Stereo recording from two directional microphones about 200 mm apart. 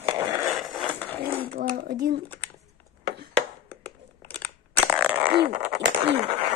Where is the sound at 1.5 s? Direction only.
50° right (ahead or behind).